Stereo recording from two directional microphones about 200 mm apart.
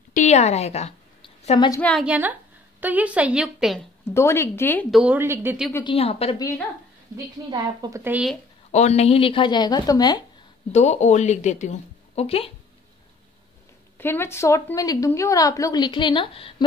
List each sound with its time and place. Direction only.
0.1 s a sound: 35° left (ahead or behind)
1.7 s a woman's voice: 5° left (ahead or behind)
2.0 s a woman's voice: 10° right (ahead or behind)
4.1 s a woman's voice: 15° left (ahead or behind)
4.9 s a woman's voice: 5° right (ahead or behind)
5.9 s a woman's voice: 30° left (ahead or behind)
7.4 s a woman's voice: 20° right (ahead or behind)
8.7 s a woman's voice: 35° left (ahead or behind)
10.7 s a woman's voice: 35° left (ahead or behind)
13.9 s a woman's voice: 10° left (ahead or behind)